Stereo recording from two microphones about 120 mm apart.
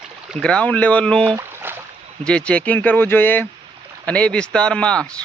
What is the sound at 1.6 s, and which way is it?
Boat, 15° right (ahead or behind).